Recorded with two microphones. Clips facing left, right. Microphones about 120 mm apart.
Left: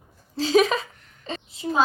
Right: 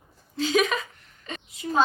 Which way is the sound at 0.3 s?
30° left (ahead or behind).